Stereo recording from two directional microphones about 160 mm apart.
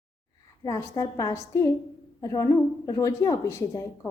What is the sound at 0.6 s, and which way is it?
A woman's voice, 20° left (ahead or behind).